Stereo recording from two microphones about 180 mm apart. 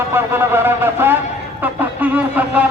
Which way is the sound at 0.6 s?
10° right (ahead or behind).